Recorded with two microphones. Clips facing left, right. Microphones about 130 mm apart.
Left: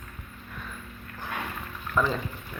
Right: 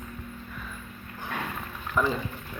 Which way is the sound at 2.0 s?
10° right (ahead or behind).